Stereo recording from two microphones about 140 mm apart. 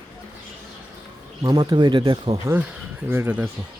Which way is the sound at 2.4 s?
15° right (ahead or behind).